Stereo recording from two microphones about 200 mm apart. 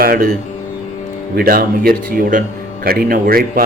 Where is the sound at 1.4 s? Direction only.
45° right (ahead or behind).